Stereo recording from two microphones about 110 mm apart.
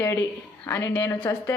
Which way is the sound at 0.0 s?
25° left (ahead or behind).